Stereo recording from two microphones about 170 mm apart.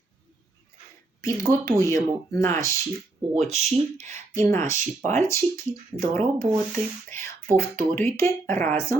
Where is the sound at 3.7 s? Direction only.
40° right (ahead or behind).